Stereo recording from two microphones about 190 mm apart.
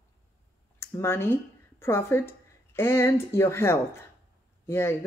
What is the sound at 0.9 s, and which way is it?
Speech, 15° left (ahead or behind).